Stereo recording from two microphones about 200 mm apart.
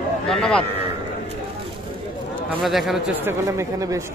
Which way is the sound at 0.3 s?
5° left (ahead or behind).